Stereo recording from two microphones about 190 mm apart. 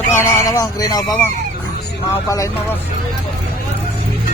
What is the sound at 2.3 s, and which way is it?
Speech, 15° left (ahead or behind).